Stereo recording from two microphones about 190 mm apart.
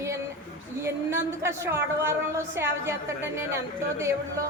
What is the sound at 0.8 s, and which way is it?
A woman's voice, 15° right (ahead or behind).